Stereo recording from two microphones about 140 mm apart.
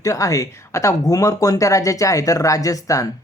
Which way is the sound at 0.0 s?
25° left (ahead or behind).